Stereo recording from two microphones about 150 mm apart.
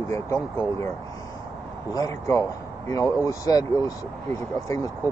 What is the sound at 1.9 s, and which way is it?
Speech, 25° left (ahead or behind).